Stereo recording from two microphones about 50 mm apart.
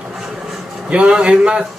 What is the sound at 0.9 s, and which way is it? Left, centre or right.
Speech, right.